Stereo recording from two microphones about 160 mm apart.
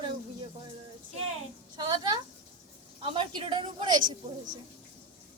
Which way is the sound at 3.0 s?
30° right (ahead or behind).